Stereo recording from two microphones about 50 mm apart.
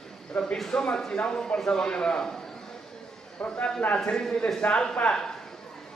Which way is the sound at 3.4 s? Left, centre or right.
Left.